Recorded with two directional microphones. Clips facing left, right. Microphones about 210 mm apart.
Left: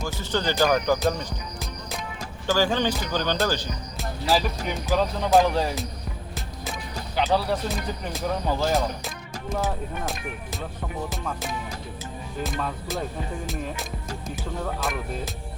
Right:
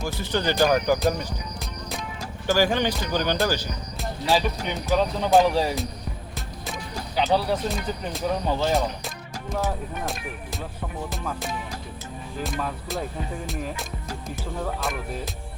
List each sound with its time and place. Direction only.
0.0 s speech: 15° right (ahead or behind)
2.5 s speech: 15° right (ahead or behind)
3.9 s speech: centre (ahead or behind)
7.2 s speech: centre (ahead or behind)
11.1 s speech: centre (ahead or behind)